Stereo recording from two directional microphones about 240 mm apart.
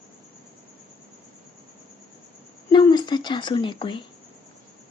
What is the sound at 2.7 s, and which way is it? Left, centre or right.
A woman's voice, centre.